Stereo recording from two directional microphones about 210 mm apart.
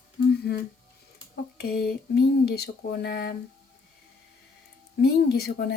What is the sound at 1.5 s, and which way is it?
Speech, 50° left (ahead or behind).